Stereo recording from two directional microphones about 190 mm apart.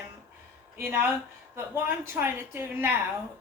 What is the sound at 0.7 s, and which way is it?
A woman's voice, 10° right (ahead or behind).